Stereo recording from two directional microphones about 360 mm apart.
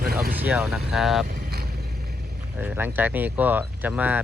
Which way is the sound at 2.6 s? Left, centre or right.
Centre.